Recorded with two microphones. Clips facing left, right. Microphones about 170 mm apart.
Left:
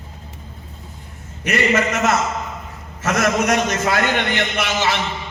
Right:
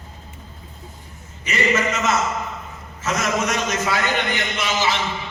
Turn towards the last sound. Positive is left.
turn(degrees=65)  # may be behind; listen again after turning